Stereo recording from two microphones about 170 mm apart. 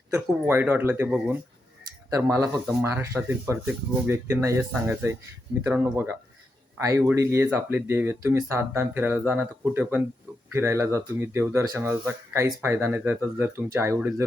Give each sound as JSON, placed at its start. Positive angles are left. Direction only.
{"t": 0.4, "sound": "speech", "side_deg": -10}